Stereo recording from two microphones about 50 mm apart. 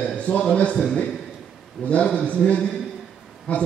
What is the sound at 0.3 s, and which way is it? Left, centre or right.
Mantra, left.